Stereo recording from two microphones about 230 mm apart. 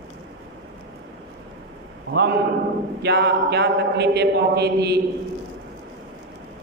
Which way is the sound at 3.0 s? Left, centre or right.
Right.